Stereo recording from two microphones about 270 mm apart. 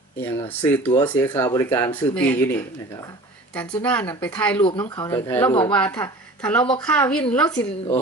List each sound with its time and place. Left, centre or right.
0.2 s a woman's voice: centre
4.5 s speech: centre
5.7 s a woman's voice: centre